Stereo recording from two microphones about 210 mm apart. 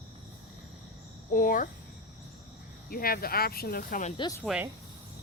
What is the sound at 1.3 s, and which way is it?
Speech, 40° left (ahead or behind).